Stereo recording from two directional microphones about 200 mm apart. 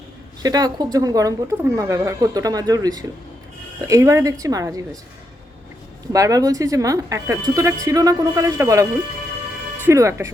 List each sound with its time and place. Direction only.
0.4 s speech: 20° right (ahead or behind)
6.1 s speech: 15° right (ahead or behind)